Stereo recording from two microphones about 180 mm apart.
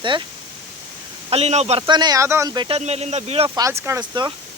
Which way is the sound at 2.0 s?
20° right (ahead or behind).